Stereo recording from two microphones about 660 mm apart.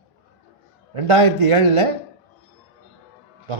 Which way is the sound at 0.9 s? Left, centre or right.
Right.